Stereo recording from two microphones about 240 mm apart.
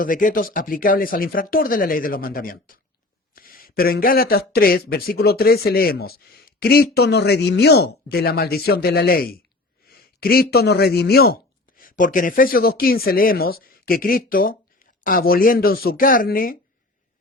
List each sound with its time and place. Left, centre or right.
0.0 s speech: left